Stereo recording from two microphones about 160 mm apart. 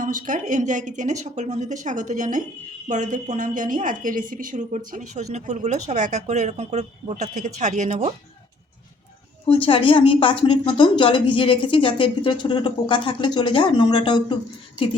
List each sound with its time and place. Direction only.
0.0 s a woman's voice: 55° right (ahead or behind)
9.5 s a woman's voice: 35° left (ahead or behind)